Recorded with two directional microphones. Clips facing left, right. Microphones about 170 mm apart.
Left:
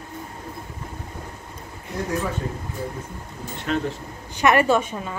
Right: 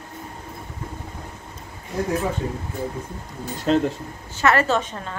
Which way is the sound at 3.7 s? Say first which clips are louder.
Right 6 dB; 35° right (ahead or behind).